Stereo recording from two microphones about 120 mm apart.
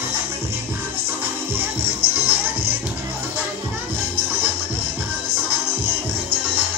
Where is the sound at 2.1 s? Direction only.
15° right (ahead or behind).